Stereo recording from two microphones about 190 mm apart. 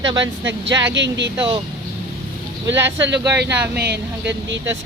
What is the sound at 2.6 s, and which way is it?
Speech, 70° right (ahead or behind).